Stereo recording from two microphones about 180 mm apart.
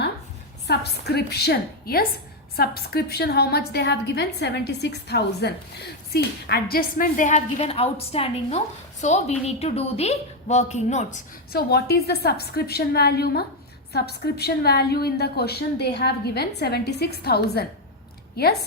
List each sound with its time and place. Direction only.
0.7 s a woman's voice: 65° left (ahead or behind); by 11.2 s 40° left (ahead or behind)
11.5 s a woman's voice: 60° left (ahead or behind)